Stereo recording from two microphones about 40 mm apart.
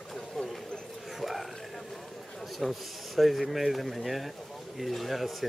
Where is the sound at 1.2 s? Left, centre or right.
Centre.